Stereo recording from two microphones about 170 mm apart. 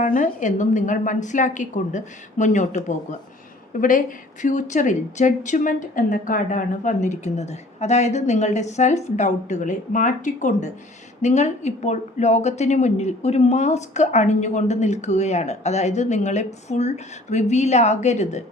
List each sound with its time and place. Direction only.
0.0 s a woman's voice: 50° left (ahead or behind)